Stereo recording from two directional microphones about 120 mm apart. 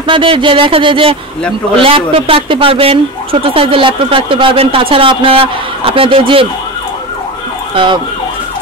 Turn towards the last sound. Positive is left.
turn(degrees=-45)  # may be behind; listen again after turning